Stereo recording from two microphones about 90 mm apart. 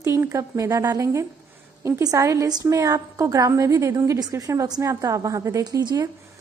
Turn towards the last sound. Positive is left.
turn(degrees=-40)  # may be behind; listen again after turning